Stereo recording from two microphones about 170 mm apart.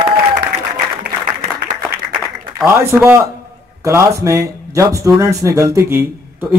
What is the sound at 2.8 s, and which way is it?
Speech, 15° right (ahead or behind).